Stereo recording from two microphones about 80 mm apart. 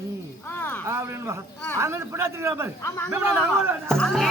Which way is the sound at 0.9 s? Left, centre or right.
Right.